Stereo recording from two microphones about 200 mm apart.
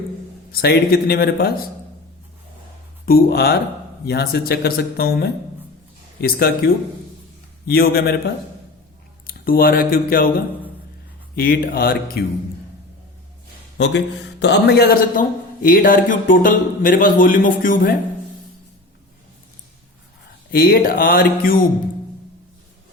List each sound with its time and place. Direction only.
0.5 s a man's voice: 50° left (ahead or behind)
3.1 s a man's voice: 50° left (ahead or behind)
7.7 s a man's voice: 50° left (ahead or behind)
9.2 s speech: 45° left (ahead or behind)
11.3 s a man's voice: 45° left (ahead or behind)
13.7 s a man's voice: 60° left (ahead or behind); by 17.9 s 45° left (ahead or behind)
20.5 s a man's voice: 50° left (ahead or behind)